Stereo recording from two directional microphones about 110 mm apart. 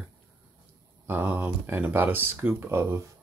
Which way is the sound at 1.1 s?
15° right (ahead or behind).